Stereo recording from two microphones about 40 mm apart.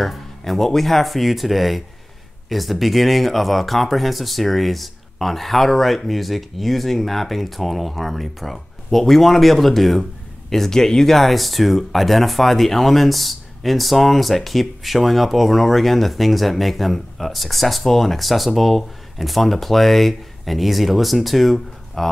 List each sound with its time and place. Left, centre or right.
0.0 s speech: centre